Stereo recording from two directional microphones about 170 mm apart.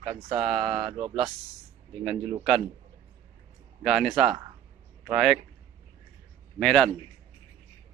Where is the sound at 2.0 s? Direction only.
5° left (ahead or behind).